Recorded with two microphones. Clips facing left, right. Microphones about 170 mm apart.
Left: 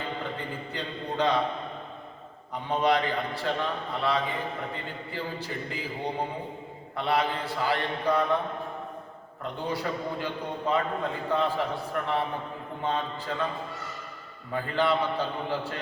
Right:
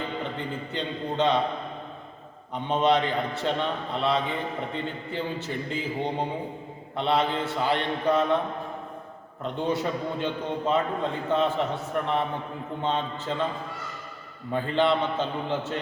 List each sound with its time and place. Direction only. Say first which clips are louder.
0.7 s a man's voice: right 4 dB; 20° right (ahead or behind)
2.6 s a man's voice: right 2 dB; 20° right (ahead or behind)
9.6 s a man's voice: right 3 dB; 20° right (ahead or behind)
14.5 s a man's voice: right 3 dB; 25° right (ahead or behind)